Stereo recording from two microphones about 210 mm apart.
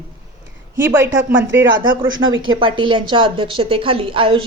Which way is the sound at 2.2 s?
20° right (ahead or behind).